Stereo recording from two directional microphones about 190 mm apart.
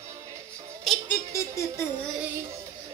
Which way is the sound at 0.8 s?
Centre (ahead or behind).